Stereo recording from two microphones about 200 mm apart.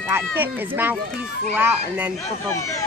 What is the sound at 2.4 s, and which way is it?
Speech, 15° left (ahead or behind).